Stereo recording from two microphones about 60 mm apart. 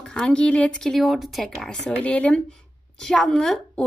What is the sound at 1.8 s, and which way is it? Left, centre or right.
Speech, left.